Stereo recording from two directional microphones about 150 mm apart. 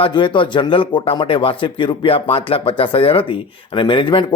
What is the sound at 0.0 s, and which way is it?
Speech, 35° left (ahead or behind).